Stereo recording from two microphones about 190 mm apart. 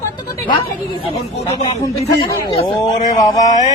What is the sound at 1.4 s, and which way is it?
Speech, 30° left (ahead or behind).